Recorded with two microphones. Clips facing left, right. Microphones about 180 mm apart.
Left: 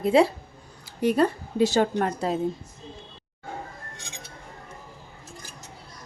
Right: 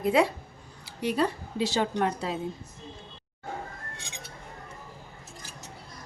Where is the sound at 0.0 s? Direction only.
30° left (ahead or behind).